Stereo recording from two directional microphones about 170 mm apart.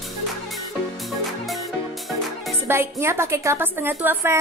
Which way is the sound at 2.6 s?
15° right (ahead or behind).